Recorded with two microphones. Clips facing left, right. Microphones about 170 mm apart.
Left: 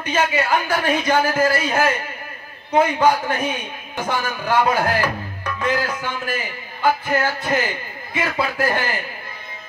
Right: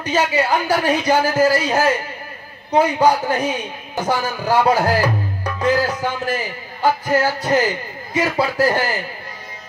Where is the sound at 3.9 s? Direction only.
40° right (ahead or behind).